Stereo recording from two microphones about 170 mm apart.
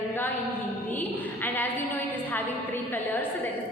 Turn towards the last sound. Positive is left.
turn(degrees=10)  # may be behind; listen again after turning